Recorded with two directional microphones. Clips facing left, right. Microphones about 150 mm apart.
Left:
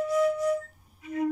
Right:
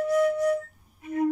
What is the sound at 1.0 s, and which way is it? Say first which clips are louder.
Music: right 3 dB; 45° right (ahead or behind).